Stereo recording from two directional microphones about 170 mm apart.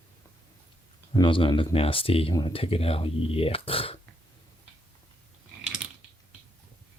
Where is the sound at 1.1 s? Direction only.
30° left (ahead or behind).